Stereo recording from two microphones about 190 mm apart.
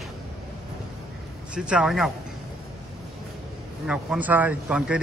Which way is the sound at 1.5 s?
5° right (ahead or behind).